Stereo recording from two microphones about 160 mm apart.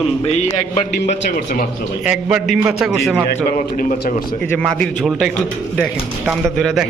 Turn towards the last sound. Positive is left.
turn(degrees=0)  # may be behind; listen again after turning